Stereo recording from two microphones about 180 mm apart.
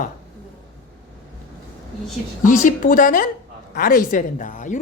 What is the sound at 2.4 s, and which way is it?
A woman's voice, 50° left (ahead or behind).